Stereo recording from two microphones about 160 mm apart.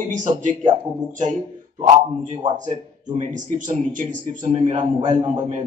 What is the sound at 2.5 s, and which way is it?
Speech, 45° right (ahead or behind).